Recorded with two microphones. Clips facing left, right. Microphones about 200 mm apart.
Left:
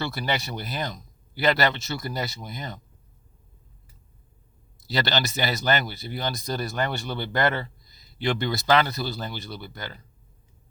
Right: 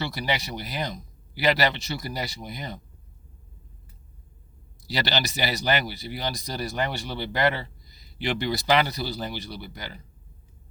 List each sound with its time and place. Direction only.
0.0 s speech: 15° right (ahead or behind)
4.9 s speech: 15° right (ahead or behind)